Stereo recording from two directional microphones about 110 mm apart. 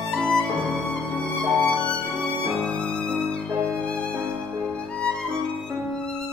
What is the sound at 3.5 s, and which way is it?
Violin, 25° right (ahead or behind).